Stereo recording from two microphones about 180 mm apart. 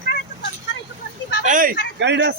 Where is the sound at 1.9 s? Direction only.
75° right (ahead or behind).